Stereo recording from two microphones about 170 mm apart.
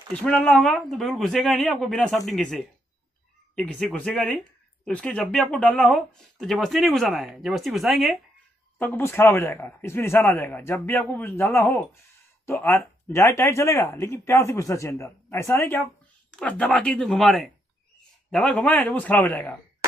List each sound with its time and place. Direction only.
0.1 s speech: 5° left (ahead or behind)
8.7 s speech: 10° left (ahead or behind)